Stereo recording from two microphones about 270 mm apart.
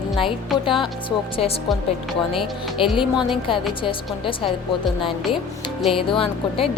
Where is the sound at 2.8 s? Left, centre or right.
Centre.